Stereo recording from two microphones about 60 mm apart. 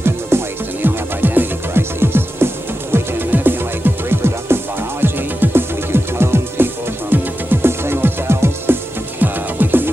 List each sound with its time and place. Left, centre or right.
0.3 s music: right